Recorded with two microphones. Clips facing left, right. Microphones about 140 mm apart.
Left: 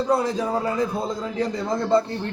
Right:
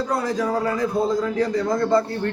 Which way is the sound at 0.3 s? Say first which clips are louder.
Right 1 dB; 25° left (ahead or behind).